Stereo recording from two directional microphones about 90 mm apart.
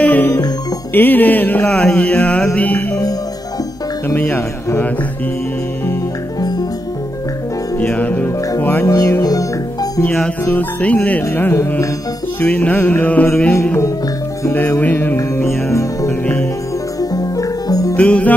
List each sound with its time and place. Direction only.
0.0 s music: 20° left (ahead or behind)
4.1 s music: 20° left (ahead or behind)
7.8 s music: 15° left (ahead or behind)
8.5 s carnatic music: 20° left (ahead or behind)
8.8 s music: 35° left (ahead or behind)
10.4 s music: 20° left (ahead or behind)
11.2 s carnatic music: 25° left (ahead or behind)
12.4 s music: 15° left (ahead or behind)
14.8 s carnatic music: 20° left (ahead or behind)
15.1 s music: 30° left (ahead or behind)
17.9 s music: 15° left (ahead or behind)